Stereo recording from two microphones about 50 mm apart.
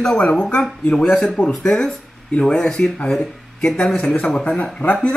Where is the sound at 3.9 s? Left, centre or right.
Left.